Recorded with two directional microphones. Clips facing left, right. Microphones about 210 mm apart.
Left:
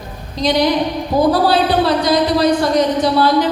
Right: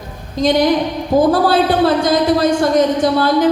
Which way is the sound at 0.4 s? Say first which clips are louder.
Right 2 dB; 50° right (ahead or behind).